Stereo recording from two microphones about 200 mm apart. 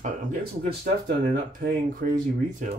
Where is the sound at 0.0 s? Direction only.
45° right (ahead or behind).